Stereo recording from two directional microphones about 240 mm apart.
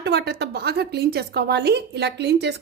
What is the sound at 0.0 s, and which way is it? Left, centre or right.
Speech, right.